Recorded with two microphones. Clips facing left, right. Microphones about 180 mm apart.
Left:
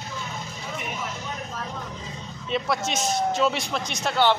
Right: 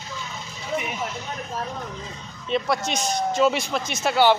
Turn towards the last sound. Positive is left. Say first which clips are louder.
# right 3 dB
turn(degrees=-5)  # may be behind; listen again after turning